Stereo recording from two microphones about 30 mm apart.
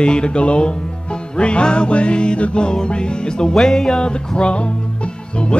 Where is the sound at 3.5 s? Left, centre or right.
Centre.